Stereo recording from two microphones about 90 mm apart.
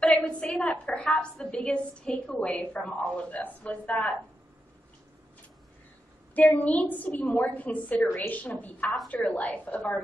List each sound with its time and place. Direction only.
0.0 s a woman's voice: 10° left (ahead or behind)
6.3 s a woman's voice: 15° left (ahead or behind)